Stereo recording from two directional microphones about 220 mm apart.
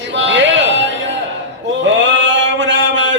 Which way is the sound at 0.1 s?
55° right (ahead or behind).